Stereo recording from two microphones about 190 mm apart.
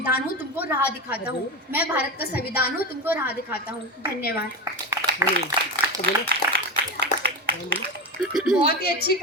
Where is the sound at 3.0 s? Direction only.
10° right (ahead or behind).